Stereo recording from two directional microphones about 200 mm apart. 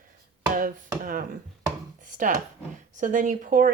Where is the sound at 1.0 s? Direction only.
45° right (ahead or behind).